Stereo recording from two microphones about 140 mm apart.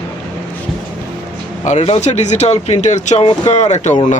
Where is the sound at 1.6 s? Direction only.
55° left (ahead or behind).